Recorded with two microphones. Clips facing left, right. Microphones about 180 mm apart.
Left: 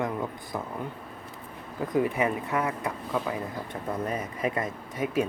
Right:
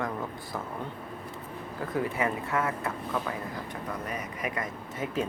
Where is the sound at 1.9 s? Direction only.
20° left (ahead or behind).